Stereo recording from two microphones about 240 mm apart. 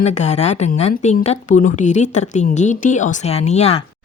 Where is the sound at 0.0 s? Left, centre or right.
Left.